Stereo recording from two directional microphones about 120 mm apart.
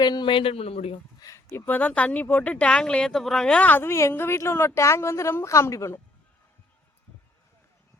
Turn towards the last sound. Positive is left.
turn(degrees=25)  # may be behind; listen again after turning